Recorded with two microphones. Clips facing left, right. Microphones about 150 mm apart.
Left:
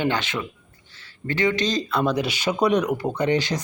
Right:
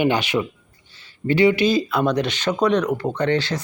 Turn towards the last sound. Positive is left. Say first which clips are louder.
# right 1 dB
turn(degrees=15)  # may be behind; listen again after turning